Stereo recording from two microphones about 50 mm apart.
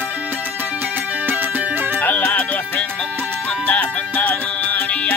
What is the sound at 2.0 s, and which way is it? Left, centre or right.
Music, left.